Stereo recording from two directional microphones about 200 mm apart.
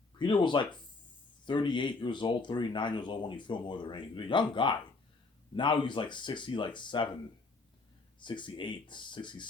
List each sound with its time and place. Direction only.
0.2 s speech: 25° left (ahead or behind)
8.2 s speech: 25° left (ahead or behind)